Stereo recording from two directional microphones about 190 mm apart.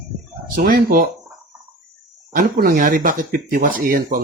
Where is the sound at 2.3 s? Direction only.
45° right (ahead or behind).